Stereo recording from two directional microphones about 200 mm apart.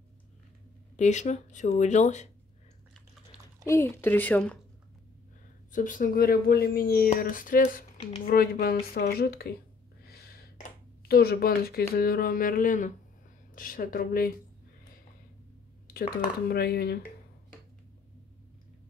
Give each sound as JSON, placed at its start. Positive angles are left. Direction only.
{"t": 0.9, "sound": "speech", "side_deg": 35}
{"t": 3.6, "sound": "speech", "side_deg": 15}
{"t": 5.7, "sound": "speech", "side_deg": 40}
{"t": 10.0, "sound": "a sound", "side_deg": 50}
{"t": 11.9, "sound": "speech", "side_deg": 50}
{"t": 15.9, "sound": "speech", "side_deg": 50}